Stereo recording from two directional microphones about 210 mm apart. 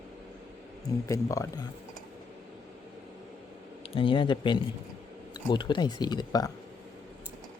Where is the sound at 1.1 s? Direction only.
15° left (ahead or behind).